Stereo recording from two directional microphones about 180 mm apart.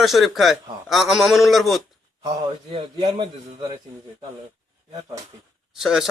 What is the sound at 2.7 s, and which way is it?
A man's voice, 25° right (ahead or behind).